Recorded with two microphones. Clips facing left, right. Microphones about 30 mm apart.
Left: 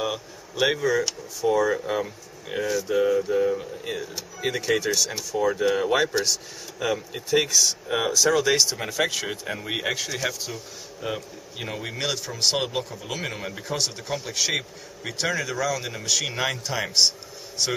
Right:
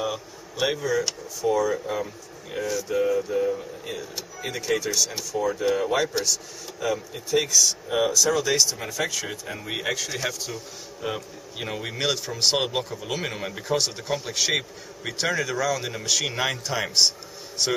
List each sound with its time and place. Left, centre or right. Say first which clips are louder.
0.0 s a man's voice: left 1 dB; centre